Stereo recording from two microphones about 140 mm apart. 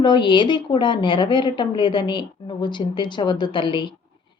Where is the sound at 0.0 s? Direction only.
35° left (ahead or behind).